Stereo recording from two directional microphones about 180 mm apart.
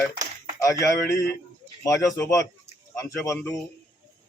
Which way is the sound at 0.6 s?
15° left (ahead or behind).